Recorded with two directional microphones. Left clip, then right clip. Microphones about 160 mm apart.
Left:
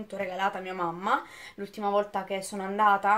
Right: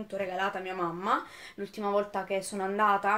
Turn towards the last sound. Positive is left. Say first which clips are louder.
# left 3 dB
turn(degrees=15)  # may be behind; listen again after turning